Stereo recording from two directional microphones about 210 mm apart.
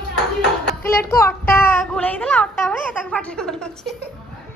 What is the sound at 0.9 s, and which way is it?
A woman's voice, 15° left (ahead or behind).